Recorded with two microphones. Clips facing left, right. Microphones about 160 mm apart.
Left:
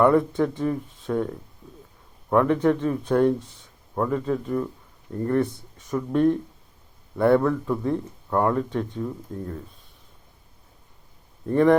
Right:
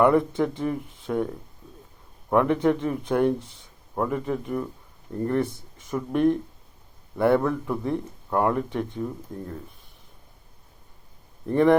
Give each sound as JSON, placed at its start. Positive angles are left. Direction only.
{"t": 0.0, "sound": "speech", "side_deg": -15}
{"t": 2.3, "sound": "speech", "side_deg": -15}
{"t": 11.5, "sound": "speech", "side_deg": -15}